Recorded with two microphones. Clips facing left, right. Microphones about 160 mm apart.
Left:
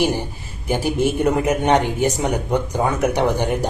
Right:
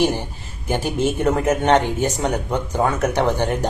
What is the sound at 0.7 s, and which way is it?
Speech, 10° left (ahead or behind).